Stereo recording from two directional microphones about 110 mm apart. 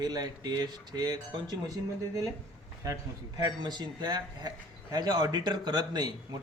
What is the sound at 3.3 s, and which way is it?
A man's voice, 40° right (ahead or behind).